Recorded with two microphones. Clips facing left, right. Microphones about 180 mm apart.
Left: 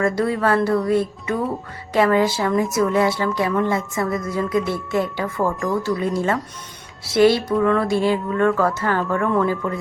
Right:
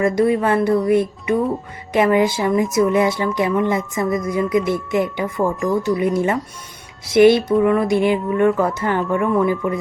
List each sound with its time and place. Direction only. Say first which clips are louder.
0.0 s a woman's voice: right 3 dB; 20° right (ahead or behind)
5.5 s speech: right 3 dB; centre (ahead or behind)
6.1 s a woman's voice: right 2 dB; 20° right (ahead or behind)